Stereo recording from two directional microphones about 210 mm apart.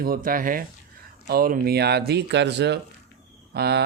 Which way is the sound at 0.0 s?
45° right (ahead or behind).